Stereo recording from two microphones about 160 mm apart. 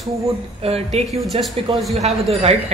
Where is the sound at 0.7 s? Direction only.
40° right (ahead or behind).